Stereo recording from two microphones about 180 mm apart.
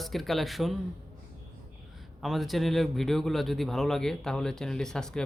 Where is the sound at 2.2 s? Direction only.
Centre (ahead or behind).